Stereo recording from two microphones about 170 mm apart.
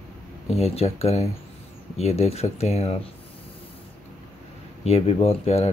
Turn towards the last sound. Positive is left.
turn(degrees=40)  # may be behind; listen again after turning